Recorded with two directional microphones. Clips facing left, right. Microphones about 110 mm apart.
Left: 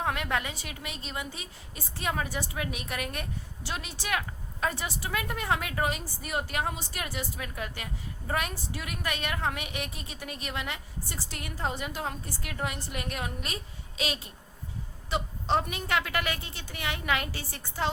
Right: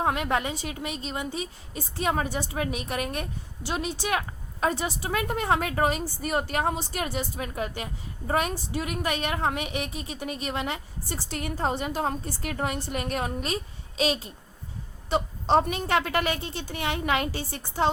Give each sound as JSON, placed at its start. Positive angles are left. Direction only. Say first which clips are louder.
{"t": 0.0, "sound": "a woman's voice", "louder": "right 5 dB", "side_deg": -25}